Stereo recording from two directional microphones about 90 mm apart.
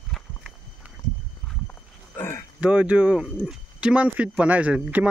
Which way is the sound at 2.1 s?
30° left (ahead or behind).